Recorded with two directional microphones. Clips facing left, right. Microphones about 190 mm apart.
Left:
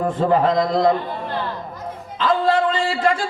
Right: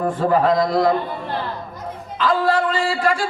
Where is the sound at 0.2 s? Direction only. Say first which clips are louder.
Even; 25° left (ahead or behind).